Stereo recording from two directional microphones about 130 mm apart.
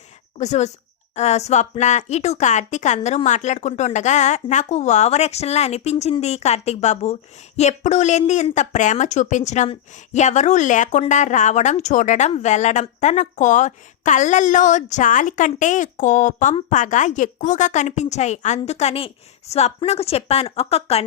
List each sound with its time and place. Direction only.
0.3 s speech: 60° left (ahead or behind)